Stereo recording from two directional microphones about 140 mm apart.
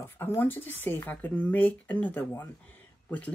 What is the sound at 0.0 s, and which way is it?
Speech, 15° left (ahead or behind).